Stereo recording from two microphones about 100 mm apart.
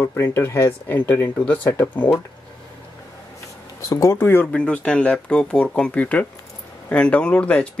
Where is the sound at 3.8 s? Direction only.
30° left (ahead or behind).